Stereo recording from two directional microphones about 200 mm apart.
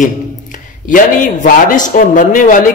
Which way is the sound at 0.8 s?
40° left (ahead or behind).